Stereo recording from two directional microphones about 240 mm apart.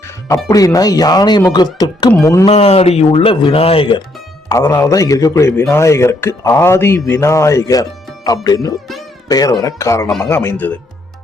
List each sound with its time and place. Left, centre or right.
0.4 s a man's voice: centre
2.5 s a man's voice: left; by 10.7 s centre